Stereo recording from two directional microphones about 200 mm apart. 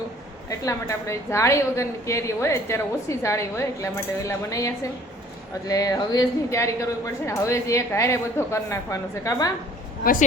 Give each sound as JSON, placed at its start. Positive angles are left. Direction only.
{"t": 0.6, "sound": "a woman's voice", "side_deg": 15}
{"t": 10.0, "sound": "speech", "side_deg": 45}